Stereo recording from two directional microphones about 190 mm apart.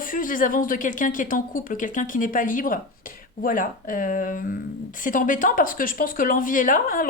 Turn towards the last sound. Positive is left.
turn(degrees=45)  # may be behind; listen again after turning